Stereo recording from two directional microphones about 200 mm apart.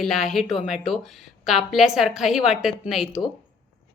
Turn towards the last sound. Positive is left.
turn(degrees=0)  # may be behind; listen again after turning